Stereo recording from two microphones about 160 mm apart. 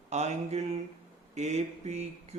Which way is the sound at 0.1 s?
45° right (ahead or behind).